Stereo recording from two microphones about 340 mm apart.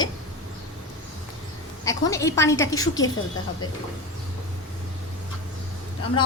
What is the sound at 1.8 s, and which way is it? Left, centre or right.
A woman's voice, centre.